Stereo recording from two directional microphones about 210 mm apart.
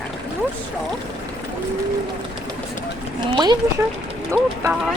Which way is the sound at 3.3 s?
20° right (ahead or behind).